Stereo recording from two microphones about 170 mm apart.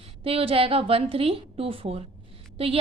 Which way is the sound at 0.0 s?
35° right (ahead or behind).